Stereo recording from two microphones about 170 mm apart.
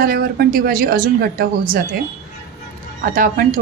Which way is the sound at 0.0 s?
60° right (ahead or behind).